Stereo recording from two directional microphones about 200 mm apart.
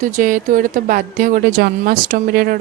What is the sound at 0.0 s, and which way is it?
A woman's voice, 40° right (ahead or behind).